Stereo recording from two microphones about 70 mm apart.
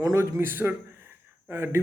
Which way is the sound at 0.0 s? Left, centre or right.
Right.